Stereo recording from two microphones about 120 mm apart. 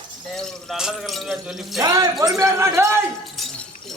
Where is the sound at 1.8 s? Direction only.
30° right (ahead or behind).